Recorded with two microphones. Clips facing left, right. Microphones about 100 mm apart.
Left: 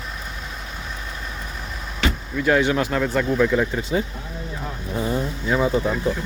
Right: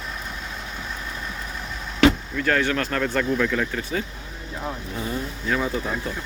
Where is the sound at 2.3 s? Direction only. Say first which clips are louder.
Left 4 dB; 10° left (ahead or behind).